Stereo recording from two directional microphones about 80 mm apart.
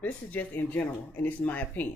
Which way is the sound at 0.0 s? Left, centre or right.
Left.